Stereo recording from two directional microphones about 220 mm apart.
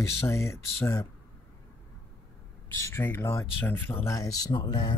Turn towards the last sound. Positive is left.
turn(degrees=20)  # may be behind; listen again after turning